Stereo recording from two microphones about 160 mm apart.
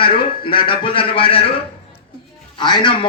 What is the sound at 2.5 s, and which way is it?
Speech, 30° left (ahead or behind).